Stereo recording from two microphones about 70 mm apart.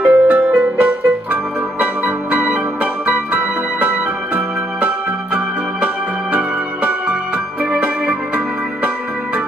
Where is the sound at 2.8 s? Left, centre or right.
Right.